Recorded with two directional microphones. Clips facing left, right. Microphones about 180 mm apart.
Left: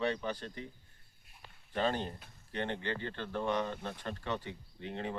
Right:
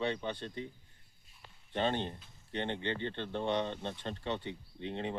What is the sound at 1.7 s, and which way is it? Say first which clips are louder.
Speech: even; 25° right (ahead or behind).